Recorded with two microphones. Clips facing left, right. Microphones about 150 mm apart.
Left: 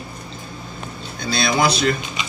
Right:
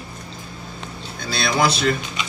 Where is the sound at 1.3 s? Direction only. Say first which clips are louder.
Left 1 dB; 5° right (ahead or behind).